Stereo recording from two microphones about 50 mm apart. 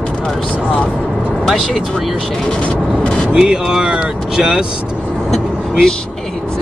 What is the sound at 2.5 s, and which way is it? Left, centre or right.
Speech, left.